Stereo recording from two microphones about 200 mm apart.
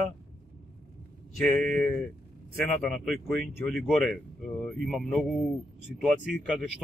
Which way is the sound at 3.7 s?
5° left (ahead or behind).